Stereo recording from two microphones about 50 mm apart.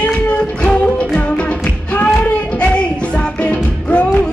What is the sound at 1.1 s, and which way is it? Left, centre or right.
Music, left.